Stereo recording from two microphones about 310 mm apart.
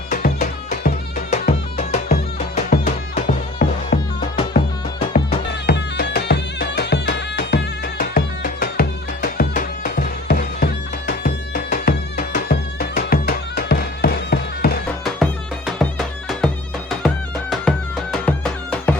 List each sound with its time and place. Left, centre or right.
0.1 s music: left
5.1 s music: left
15.2 s music: centre
17.5 s music: centre